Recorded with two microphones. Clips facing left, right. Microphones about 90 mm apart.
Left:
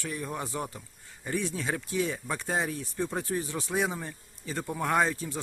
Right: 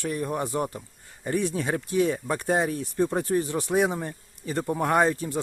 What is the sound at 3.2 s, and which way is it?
Speech, 45° right (ahead or behind).